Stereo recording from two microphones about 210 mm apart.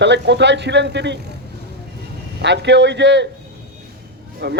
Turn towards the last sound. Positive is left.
turn(degrees=-55)  # may be behind; listen again after turning